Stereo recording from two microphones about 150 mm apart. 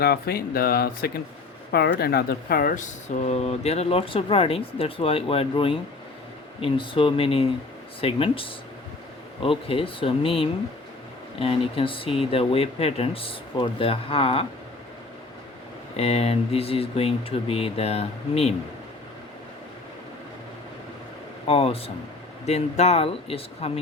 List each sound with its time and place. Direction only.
0.0 s speech: 90° left; by 14.4 s 40° left (ahead or behind)
16.0 s speech: 45° left (ahead or behind)
21.4 s speech: 40° left (ahead or behind)